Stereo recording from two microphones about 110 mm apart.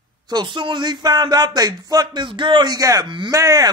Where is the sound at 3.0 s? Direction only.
45° right (ahead or behind).